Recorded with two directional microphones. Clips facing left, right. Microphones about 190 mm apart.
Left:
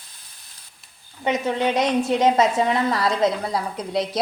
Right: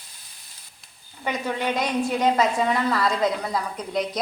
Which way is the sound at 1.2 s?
25° left (ahead or behind).